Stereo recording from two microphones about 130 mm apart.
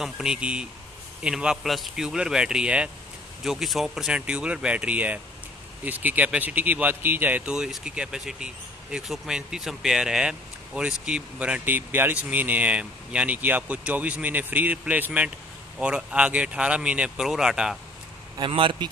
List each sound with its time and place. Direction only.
0.0 s speech: 5° right (ahead or behind)
18.4 s speech: 40° right (ahead or behind)